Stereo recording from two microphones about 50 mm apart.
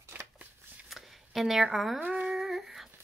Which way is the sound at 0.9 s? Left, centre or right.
Centre.